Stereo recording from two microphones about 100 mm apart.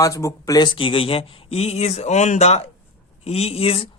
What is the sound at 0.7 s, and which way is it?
Speech, 60° left (ahead or behind).